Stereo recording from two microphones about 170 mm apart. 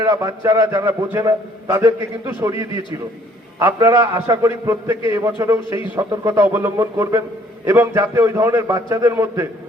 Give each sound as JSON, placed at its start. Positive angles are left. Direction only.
{"t": 0.0, "sound": "a man's voice", "side_deg": -20}